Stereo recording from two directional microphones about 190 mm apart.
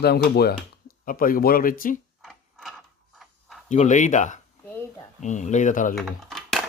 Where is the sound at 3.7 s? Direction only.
40° left (ahead or behind).